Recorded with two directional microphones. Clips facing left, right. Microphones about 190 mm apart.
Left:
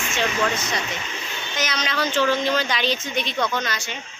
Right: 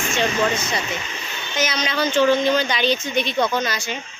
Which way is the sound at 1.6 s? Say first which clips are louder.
Right 3 dB; centre (ahead or behind).